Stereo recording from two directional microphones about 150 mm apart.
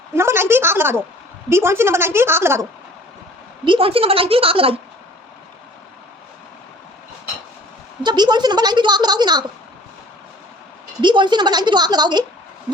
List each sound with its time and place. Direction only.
0.1 s a woman's voice: 15° right (ahead or behind)
3.6 s a woman's voice: 35° right (ahead or behind)
8.0 s a woman's voice: 30° right (ahead or behind)
11.0 s a woman's voice: 30° right (ahead or behind)